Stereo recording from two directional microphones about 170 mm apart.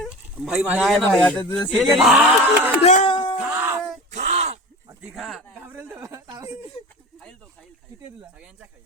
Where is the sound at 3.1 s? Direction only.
30° left (ahead or behind).